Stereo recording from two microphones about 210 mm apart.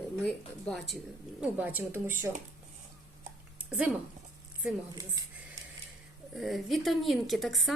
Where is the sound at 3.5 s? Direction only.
5° right (ahead or behind).